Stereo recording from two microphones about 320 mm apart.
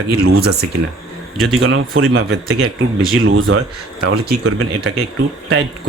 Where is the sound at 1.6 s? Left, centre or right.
Right.